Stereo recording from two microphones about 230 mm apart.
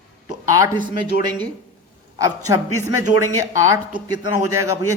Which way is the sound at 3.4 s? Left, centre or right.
Centre.